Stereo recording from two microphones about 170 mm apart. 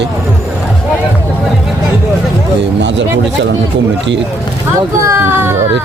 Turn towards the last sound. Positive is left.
turn(degrees=-15)  # may be behind; listen again after turning